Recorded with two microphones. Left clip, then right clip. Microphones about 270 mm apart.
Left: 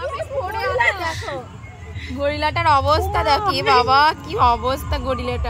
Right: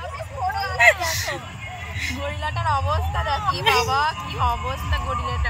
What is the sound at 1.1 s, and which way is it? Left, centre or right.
Vehicle, centre.